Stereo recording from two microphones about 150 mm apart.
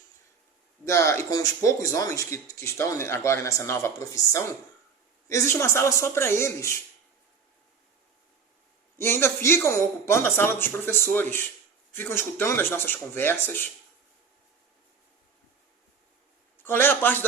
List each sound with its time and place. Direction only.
0.9 s speech: 20° left (ahead or behind)
9.0 s speech: 15° left (ahead or behind)
16.6 s speech: 15° left (ahead or behind)